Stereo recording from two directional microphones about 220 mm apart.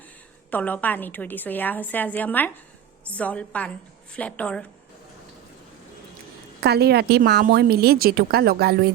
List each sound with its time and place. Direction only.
0.5 s a woman's voice: 5° left (ahead or behind)
6.6 s a woman's voice: 45° right (ahead or behind)